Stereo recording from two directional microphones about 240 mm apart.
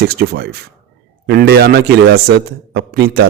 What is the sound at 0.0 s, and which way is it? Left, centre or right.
A man's voice, right.